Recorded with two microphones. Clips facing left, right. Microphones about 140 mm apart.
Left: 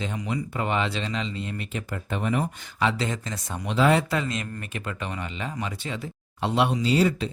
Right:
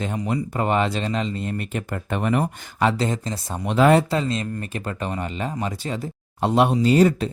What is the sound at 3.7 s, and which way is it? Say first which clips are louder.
Speech: right 5 dB; 50° right (ahead or behind).